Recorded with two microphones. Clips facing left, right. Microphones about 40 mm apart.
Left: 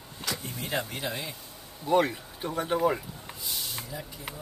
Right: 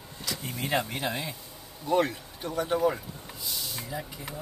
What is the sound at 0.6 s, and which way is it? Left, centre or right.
Speech, right.